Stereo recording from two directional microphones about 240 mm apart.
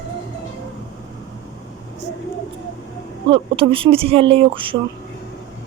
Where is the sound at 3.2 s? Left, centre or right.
Right.